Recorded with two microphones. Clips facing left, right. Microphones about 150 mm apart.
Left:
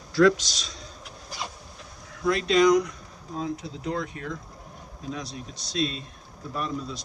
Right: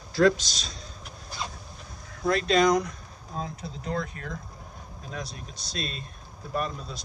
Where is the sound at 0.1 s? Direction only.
30° right (ahead or behind).